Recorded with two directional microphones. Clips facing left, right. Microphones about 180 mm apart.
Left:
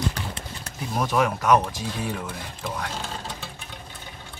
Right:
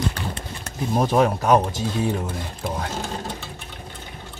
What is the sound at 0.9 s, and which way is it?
Speech, 35° right (ahead or behind).